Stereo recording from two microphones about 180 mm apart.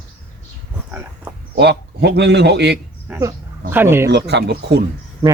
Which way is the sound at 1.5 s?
70° right (ahead or behind).